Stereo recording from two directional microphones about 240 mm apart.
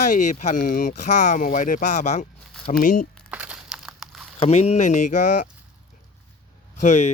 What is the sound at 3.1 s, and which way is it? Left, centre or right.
Crumpling, centre.